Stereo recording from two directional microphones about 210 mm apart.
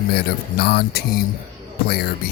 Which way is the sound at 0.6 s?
50° left (ahead or behind).